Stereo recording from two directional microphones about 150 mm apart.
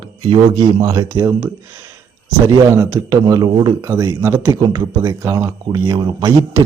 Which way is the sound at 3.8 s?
20° right (ahead or behind).